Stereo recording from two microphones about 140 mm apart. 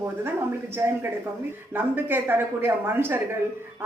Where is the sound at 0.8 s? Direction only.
20° right (ahead or behind).